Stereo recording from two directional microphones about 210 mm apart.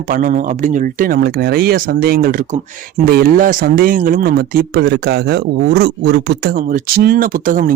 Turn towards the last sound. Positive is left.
turn(degrees=-40)  # may be behind; listen again after turning